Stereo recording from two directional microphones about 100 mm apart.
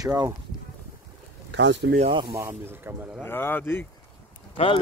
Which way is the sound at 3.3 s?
20° left (ahead or behind).